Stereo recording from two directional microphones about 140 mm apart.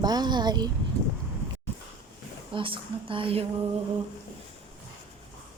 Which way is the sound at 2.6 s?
40° right (ahead or behind).